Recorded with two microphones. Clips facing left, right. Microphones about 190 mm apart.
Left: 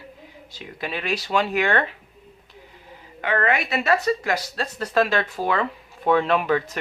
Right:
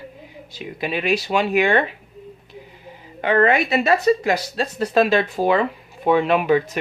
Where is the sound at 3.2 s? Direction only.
25° right (ahead or behind).